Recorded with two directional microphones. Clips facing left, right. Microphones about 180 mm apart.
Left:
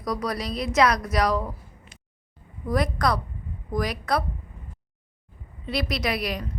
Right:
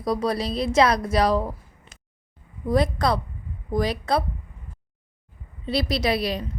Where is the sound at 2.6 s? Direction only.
25° right (ahead or behind).